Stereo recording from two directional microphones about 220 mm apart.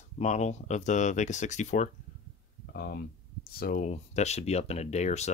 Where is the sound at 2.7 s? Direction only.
45° left (ahead or behind).